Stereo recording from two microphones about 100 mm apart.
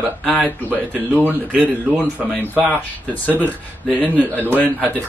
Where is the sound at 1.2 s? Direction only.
15° right (ahead or behind).